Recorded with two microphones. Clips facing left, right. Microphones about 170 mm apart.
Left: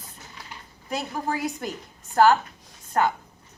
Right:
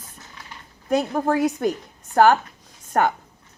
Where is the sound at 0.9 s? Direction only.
50° right (ahead or behind).